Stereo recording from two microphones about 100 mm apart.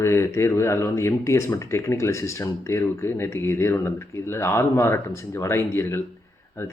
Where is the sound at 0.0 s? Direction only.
25° left (ahead or behind).